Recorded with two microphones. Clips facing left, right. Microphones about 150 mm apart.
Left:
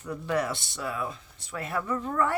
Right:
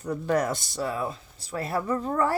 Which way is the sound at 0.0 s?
40° right (ahead or behind).